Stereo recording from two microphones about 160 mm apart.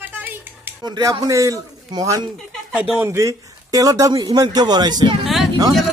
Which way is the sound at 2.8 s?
10° right (ahead or behind).